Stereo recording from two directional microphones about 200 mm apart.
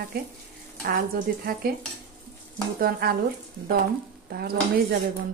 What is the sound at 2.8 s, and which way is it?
Speech, 50° right (ahead or behind).